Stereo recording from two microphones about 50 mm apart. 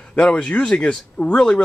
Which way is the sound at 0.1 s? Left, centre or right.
Left.